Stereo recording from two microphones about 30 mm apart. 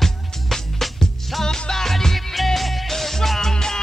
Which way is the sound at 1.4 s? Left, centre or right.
Left.